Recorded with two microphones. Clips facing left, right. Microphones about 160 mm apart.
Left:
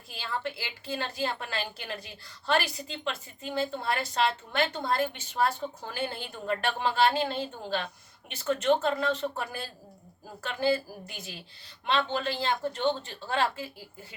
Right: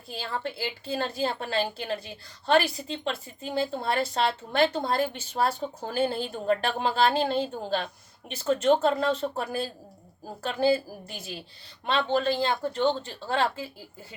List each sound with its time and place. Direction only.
0.1 s a woman's voice: 35° right (ahead or behind)
12.0 s a woman's voice: 35° right (ahead or behind)